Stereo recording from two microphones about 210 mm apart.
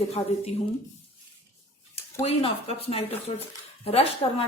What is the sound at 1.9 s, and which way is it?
A woman's voice, 30° left (ahead or behind).